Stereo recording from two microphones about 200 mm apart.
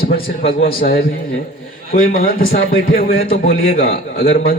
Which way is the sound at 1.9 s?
45° left (ahead or behind).